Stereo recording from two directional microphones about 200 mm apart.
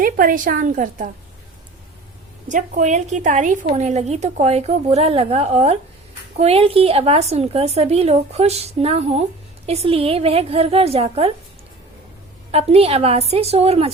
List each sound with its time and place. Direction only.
0.0 s a woman's voice: 45° right (ahead or behind)
2.5 s a woman's voice: 40° right (ahead or behind)
12.5 s a woman's voice: 30° right (ahead or behind)